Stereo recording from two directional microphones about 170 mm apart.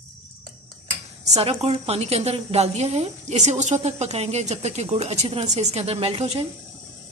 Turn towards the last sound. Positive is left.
turn(degrees=-40)  # may be behind; listen again after turning